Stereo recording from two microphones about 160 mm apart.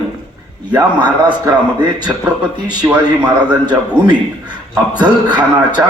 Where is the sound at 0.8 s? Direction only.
25° right (ahead or behind).